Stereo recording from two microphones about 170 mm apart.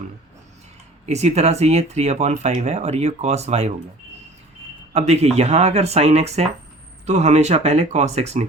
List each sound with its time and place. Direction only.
1.0 s speech: 40° right (ahead or behind)
4.9 s speech: 40° right (ahead or behind)